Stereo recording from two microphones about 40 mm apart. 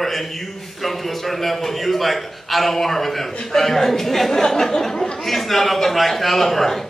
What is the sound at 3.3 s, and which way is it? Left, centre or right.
Speech, left.